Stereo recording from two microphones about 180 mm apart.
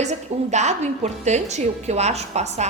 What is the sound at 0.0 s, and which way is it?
A woman's voice, 40° right (ahead or behind).